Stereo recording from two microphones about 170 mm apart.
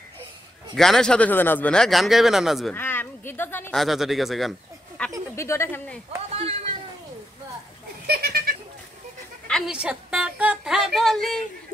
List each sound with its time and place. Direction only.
0.7 s speech: 5° left (ahead or behind)
2.7 s speech: 10° left (ahead or behind)
3.7 s speech: centre (ahead or behind)
5.3 s a woman's voice: 15° left (ahead or behind)
8.1 s goat: 60° right (ahead or behind)
9.5 s a woman's voice: centre (ahead or behind)